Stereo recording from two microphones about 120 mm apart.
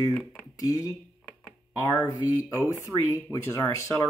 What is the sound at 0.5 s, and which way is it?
Speech, 30° left (ahead or behind).